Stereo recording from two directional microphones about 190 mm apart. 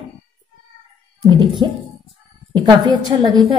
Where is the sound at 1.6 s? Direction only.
25° right (ahead or behind).